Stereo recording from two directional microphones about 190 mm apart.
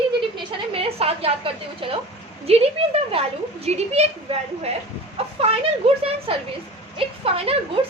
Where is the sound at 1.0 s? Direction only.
30° right (ahead or behind).